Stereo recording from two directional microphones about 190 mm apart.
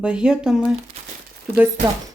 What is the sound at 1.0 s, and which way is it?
Crumpling, 35° right (ahead or behind).